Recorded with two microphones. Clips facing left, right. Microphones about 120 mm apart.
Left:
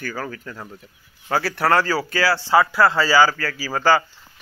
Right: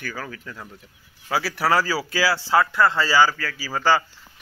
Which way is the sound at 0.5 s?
20° left (ahead or behind).